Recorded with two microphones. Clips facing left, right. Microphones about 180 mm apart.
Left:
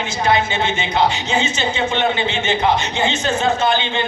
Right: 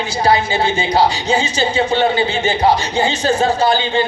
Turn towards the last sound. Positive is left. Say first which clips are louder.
# right 3 dB
turn(degrees=-35)  # may be behind; listen again after turning